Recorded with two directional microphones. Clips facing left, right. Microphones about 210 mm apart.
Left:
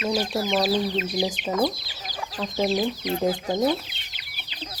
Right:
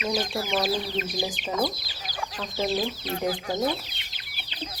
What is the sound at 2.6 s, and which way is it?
Speech, 15° left (ahead or behind).